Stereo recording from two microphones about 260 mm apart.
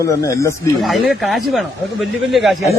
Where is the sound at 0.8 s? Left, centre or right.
Centre.